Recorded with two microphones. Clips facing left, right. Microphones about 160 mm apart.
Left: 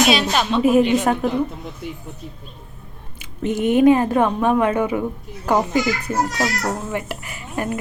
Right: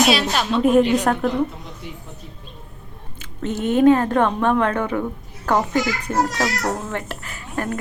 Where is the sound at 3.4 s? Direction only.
15° left (ahead or behind).